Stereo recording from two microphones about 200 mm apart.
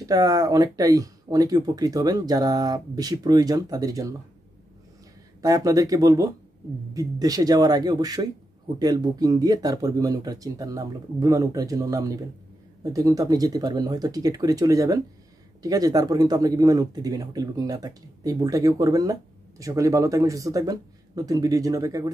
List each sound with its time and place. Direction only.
0.0 s speech: 20° right (ahead or behind)
5.4 s speech: 15° right (ahead or behind)